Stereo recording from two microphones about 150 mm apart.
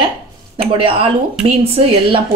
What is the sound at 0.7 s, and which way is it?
Speech, 35° right (ahead or behind).